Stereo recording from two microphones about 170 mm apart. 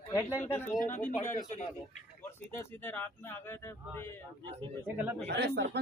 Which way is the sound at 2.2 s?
15° left (ahead or behind).